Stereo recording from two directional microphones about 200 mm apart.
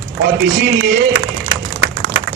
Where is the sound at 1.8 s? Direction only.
75° right (ahead or behind).